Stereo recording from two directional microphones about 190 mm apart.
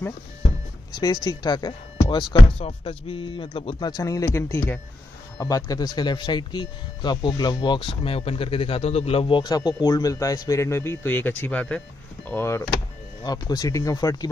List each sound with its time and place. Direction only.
0.9 s a man's voice: 20° left (ahead or behind)